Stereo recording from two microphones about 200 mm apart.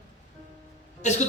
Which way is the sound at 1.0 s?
35° left (ahead or behind).